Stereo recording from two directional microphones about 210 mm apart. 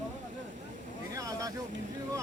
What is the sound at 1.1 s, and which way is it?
Vehicle, 15° right (ahead or behind).